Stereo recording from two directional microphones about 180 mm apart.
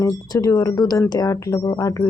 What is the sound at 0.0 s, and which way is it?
Speech, 20° left (ahead or behind).